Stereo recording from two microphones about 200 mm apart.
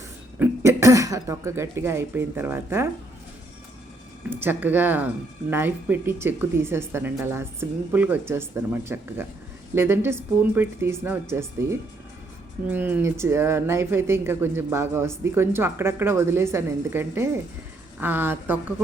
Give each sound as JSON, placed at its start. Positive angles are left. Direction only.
{"t": 0.3, "sound": "speech", "side_deg": -10}
{"t": 4.3, "sound": "speech", "side_deg": -10}